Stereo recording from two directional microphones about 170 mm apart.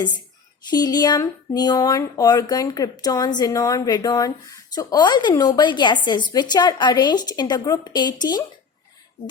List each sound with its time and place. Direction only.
0.7 s speech: 25° left (ahead or behind)